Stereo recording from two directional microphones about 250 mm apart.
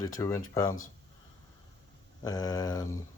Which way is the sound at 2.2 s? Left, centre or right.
Centre.